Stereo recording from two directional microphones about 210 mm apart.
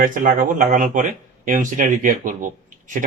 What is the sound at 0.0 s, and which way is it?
Speech, 40° right (ahead or behind).